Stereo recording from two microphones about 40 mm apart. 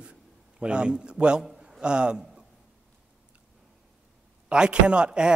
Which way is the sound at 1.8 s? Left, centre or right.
Right.